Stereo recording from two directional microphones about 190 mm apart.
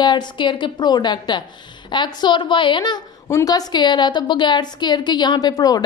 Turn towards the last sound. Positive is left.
turn(degrees=20)  # may be behind; listen again after turning